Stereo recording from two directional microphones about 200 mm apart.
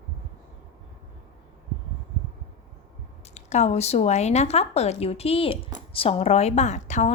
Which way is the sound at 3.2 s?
35° left (ahead or behind).